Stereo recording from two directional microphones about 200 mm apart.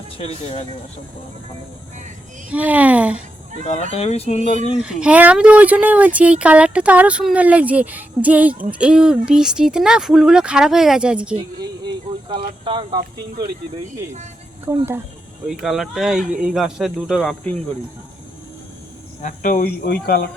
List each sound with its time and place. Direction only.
0.2 s speech: 30° left (ahead or behind)
2.5 s speech: 5° right (ahead or behind)
3.9 s speech: 30° left (ahead or behind)
4.8 s speech: 5° right (ahead or behind)
12.3 s speech: 25° right (ahead or behind)
14.7 s speech: 10° right (ahead or behind)
15.6 s speech: centre (ahead or behind)
19.2 s speech: 40° left (ahead or behind)